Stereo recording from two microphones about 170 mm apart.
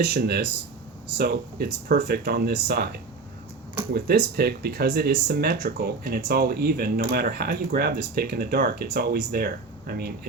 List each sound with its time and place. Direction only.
0.0 s speech: 70° right (ahead or behind)